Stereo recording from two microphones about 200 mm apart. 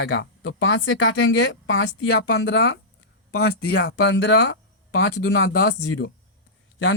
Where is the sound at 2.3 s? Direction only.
60° left (ahead or behind).